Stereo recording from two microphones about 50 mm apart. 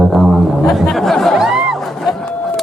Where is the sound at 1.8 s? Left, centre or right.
Centre.